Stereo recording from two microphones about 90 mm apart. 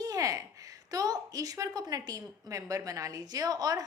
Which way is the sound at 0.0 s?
40° right (ahead or behind).